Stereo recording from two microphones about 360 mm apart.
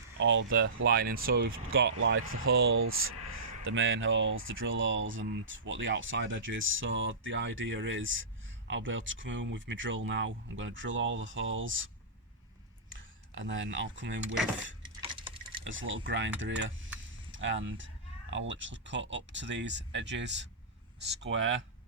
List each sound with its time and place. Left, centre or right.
0.2 s speech: right
12.9 s speech: right
15.0 s tick-tock: centre
15.6 s speech: right